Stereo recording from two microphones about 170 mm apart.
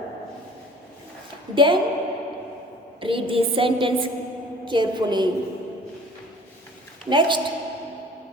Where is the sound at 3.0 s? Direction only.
30° right (ahead or behind).